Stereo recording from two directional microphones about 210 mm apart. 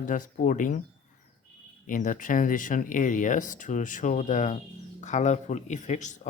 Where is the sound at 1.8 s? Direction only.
40° left (ahead or behind).